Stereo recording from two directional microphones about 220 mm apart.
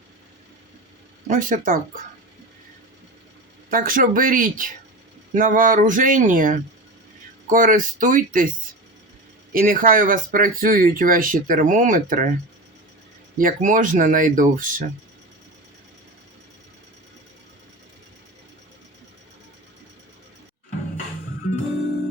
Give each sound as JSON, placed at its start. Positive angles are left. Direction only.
{"t": 1.3, "sound": "speech", "side_deg": -35}
{"t": 3.7, "sound": "speech", "side_deg": -40}
{"t": 9.5, "sound": "speech", "side_deg": -40}
{"t": 13.4, "sound": "speech", "side_deg": -35}